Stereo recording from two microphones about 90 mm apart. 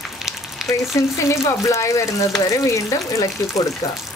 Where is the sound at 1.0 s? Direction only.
30° left (ahead or behind).